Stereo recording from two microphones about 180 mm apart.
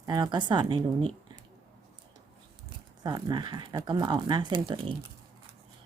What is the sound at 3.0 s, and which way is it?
Speech, 25° right (ahead or behind).